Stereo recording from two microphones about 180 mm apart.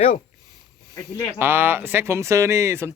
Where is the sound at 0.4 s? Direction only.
20° right (ahead or behind).